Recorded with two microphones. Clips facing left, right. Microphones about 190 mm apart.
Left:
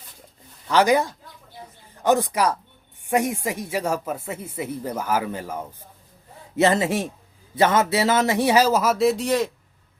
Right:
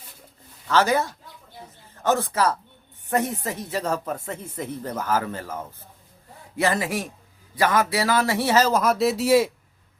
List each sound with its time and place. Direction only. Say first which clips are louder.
0.7 s speech: left 2 dB; 15° left (ahead or behind)
6.6 s speech: left 4 dB; 25° left (ahead or behind); by 9.5 s 5° right (ahead or behind)